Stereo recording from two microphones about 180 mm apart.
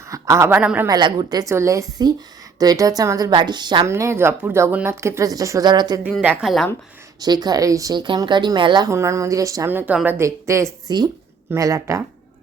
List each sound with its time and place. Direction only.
0.1 s speech: 15° right (ahead or behind)
0.9 s speech: 25° right (ahead or behind)
6.0 s a woman's voice: 5° left (ahead or behind)
6.2 s a woman's voice: 5° right (ahead or behind)
7.2 s speech: 20° right (ahead or behind)